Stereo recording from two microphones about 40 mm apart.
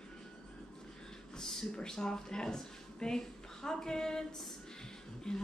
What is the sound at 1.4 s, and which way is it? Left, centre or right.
Speech, centre.